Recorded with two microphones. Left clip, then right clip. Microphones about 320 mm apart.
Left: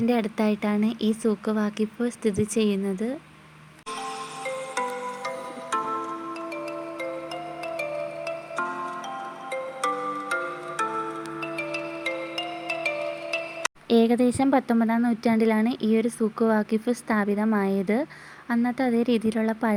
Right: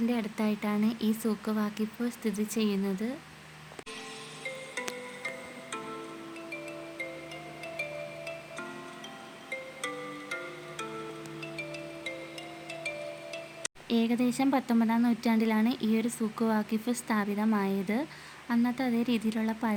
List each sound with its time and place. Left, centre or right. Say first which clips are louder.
0.1 s speech: left 8 dB; centre
4.4 s music: left 8 dB; left
7.6 s music: left 7 dB; left; by 18.0 s centre
18.4 s speech: left 5 dB; centre